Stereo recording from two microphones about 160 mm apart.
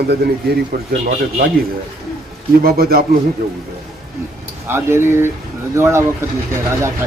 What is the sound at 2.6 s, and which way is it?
Speech, 70° right (ahead or behind).